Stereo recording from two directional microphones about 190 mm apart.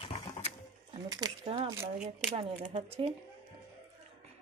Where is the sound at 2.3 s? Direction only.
30° right (ahead or behind).